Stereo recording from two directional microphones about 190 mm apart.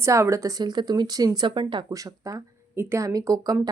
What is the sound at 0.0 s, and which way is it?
Speech, 15° right (ahead or behind).